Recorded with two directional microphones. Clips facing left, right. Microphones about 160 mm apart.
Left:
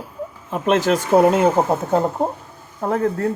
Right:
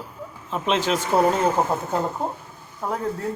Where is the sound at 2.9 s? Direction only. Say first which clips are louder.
Left 7 dB; 75° left (ahead or behind).